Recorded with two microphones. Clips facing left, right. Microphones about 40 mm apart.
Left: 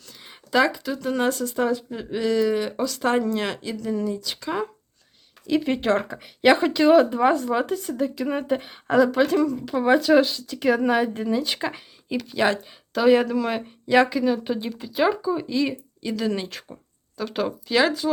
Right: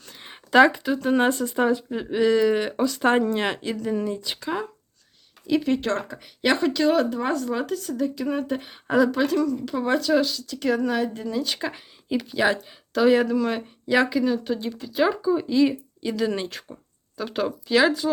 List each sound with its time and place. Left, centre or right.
0.0 s a sound: right
0.9 s speech: right
4.4 s speech: centre
5.6 s speech: centre
8.0 s speech: centre
11.7 s a woman's voice: centre